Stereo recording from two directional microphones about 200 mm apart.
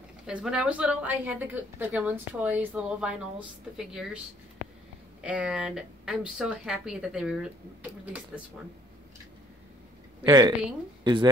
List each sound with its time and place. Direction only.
0.3 s a woman's voice: 5° right (ahead or behind)
5.2 s speech: 5° right (ahead or behind)
10.2 s speech: 20° right (ahead or behind)